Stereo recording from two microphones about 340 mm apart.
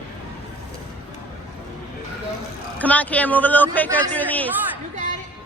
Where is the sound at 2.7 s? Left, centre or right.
Centre.